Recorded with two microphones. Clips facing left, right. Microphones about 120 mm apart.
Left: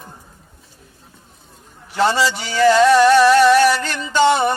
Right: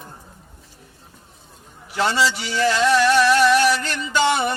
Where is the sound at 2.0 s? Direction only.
40° left (ahead or behind).